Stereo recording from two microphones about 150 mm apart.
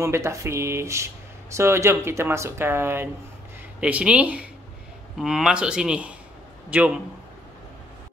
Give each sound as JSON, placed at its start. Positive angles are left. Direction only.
{"t": 0.0, "sound": "speech", "side_deg": -20}